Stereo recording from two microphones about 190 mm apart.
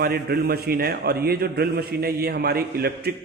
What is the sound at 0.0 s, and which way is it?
A man's voice, 55° right (ahead or behind).